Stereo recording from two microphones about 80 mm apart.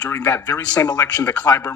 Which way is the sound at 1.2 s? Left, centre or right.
Centre.